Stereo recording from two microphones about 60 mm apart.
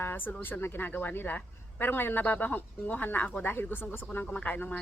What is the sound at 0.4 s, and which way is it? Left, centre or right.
Speech, left.